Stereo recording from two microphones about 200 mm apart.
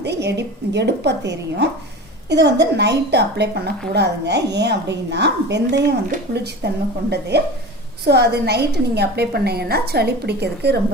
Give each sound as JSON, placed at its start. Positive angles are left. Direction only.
{"t": 0.0, "sound": "a woman's voice", "side_deg": -60}